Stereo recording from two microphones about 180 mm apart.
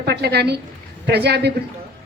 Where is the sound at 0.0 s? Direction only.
65° right (ahead or behind).